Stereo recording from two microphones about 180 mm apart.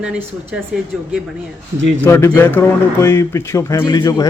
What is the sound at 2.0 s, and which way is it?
A man's voice, 15° left (ahead or behind).